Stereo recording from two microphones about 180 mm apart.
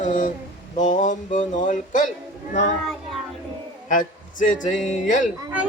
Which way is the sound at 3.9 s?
45° left (ahead or behind).